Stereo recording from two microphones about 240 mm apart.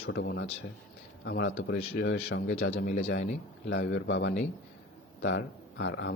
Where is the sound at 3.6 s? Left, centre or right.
Left.